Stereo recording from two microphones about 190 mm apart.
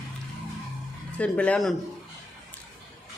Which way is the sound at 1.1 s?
5° left (ahead or behind).